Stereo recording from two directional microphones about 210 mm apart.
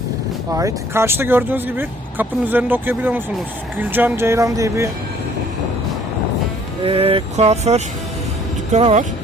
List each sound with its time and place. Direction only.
0.5 s speech: 15° right (ahead or behind)
6.8 s speech: 25° right (ahead or behind)